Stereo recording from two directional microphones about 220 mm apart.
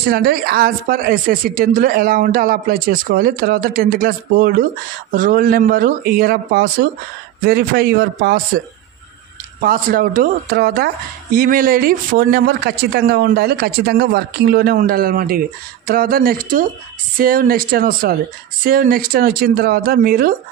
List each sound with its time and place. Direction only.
0.0 s speech: 45° right (ahead or behind)
9.6 s speech: 40° right (ahead or behind)